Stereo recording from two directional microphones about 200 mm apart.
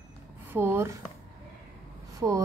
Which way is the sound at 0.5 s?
10° right (ahead or behind).